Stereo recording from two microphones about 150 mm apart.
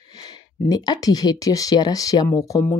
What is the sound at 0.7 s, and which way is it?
Speech, 25° left (ahead or behind).